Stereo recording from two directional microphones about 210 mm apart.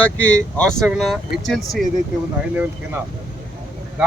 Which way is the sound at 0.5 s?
5° left (ahead or behind).